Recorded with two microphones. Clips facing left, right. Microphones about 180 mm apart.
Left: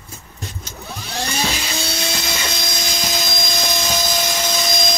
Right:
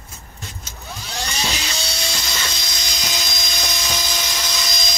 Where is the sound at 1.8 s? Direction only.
55° left (ahead or behind).